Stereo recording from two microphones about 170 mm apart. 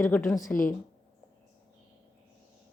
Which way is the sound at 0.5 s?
50° left (ahead or behind).